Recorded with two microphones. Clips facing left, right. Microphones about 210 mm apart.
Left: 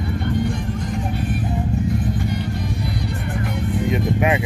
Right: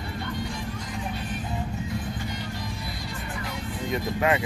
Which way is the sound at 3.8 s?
20° left (ahead or behind).